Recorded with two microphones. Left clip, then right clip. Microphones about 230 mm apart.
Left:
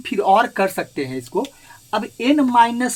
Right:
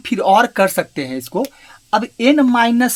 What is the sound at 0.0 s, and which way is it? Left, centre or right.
Speech, right.